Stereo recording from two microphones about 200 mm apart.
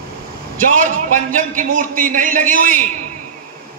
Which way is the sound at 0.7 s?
40° right (ahead or behind).